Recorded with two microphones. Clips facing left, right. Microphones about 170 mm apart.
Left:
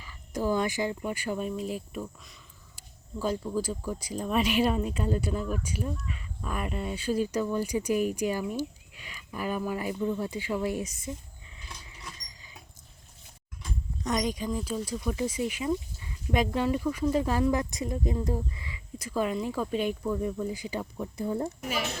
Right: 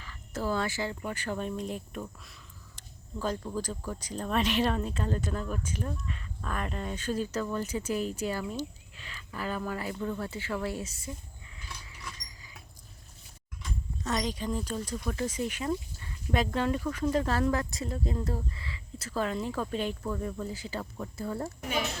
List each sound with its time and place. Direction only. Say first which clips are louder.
0.0 s speech: left 3 dB; 15° left (ahead or behind)
11.5 s a sound: even; 25° left (ahead or behind)
14.0 s speech: left 3 dB; 15° left (ahead or behind)